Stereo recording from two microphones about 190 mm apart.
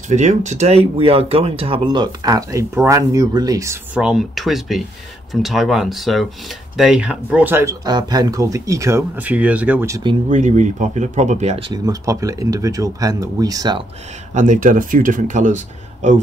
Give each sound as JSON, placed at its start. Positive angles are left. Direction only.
{"t": 0.1, "sound": "speech", "side_deg": -40}
{"t": 10.3, "sound": "speech", "side_deg": -40}
{"t": 11.7, "sound": "speech", "side_deg": -20}
{"t": 14.3, "sound": "speech", "side_deg": -40}